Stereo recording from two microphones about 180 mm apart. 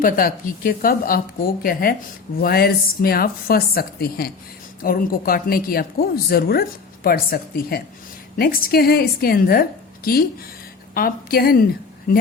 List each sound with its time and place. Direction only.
0.0 s a woman's voice: 50° left (ahead or behind)